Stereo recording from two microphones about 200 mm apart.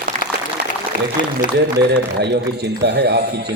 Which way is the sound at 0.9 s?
40° left (ahead or behind).